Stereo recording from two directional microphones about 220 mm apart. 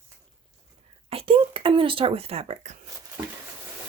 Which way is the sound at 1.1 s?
25° right (ahead or behind).